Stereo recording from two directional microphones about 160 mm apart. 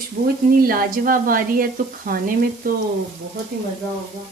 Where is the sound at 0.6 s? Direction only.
65° right (ahead or behind).